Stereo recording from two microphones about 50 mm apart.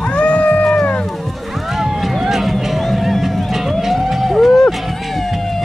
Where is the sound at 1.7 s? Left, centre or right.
Centre.